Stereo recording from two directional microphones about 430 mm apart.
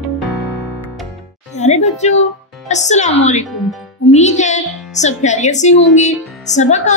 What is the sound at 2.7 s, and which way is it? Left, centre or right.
Speech, centre.